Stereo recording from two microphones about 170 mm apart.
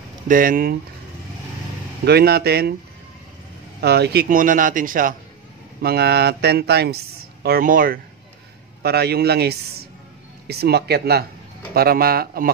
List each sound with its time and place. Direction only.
0.3 s speech: 55° right (ahead or behind)
2.0 s speech: 70° right (ahead or behind)
3.8 s a man's voice: 70° right (ahead or behind); by 5.1 s 55° right (ahead or behind)
5.8 s speech: 70° right (ahead or behind)
7.4 s speech: 60° right (ahead or behind)
8.8 s speech: 70° right (ahead or behind)